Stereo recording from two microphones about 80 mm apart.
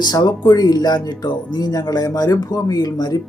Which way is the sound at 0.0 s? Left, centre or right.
Left.